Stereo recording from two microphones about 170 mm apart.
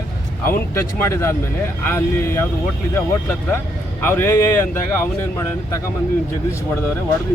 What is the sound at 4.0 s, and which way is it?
Speech, 10° left (ahead or behind).